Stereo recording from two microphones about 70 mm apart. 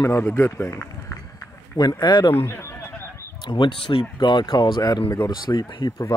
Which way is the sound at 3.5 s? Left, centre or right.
Left.